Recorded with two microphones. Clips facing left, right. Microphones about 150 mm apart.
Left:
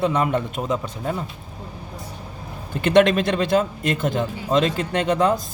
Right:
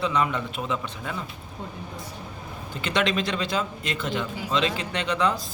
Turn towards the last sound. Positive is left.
turn(degrees=45)  # may be behind; listen again after turning